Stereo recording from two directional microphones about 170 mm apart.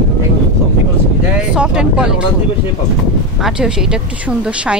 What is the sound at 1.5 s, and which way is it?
Speech, 5° right (ahead or behind).